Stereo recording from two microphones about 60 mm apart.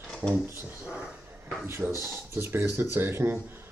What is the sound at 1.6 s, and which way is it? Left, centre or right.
Speech, right.